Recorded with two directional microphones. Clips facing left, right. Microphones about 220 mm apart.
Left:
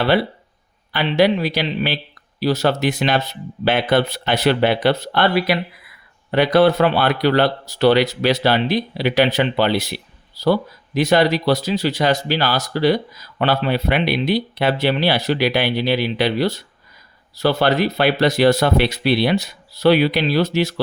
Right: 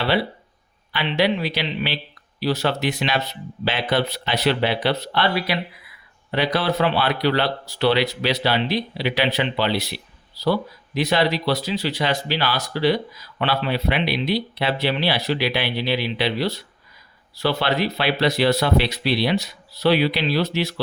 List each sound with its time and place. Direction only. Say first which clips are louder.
0.9 s speech: left 5 dB; 45° left (ahead or behind)